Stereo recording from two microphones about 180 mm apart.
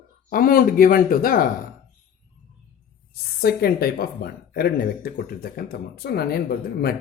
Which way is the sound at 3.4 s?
60° left (ahead or behind).